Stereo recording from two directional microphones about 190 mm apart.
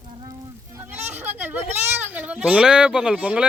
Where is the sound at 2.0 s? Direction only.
5° right (ahead or behind).